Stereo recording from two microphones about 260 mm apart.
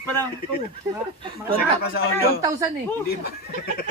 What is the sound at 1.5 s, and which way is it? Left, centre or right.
Speech, left.